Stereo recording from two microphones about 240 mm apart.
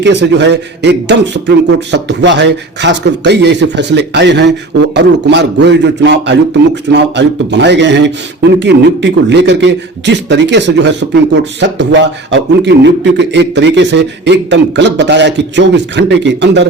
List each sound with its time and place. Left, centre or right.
0.0 s a man's voice: right